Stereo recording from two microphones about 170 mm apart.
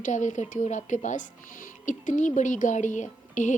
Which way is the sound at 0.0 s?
45° left (ahead or behind).